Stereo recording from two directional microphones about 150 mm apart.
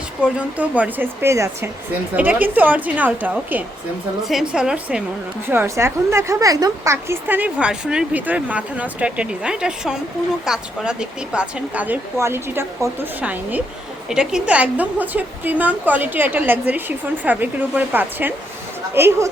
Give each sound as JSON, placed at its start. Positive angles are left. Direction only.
{"t": 0.3, "sound": "a woman's voice", "side_deg": -10}
{"t": 5.5, "sound": "a woman's voice", "side_deg": -15}